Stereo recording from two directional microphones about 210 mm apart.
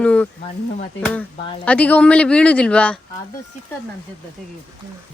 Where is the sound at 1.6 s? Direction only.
5° left (ahead or behind).